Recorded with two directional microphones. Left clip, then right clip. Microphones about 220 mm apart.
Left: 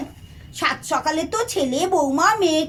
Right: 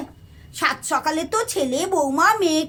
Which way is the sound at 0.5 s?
35° right (ahead or behind).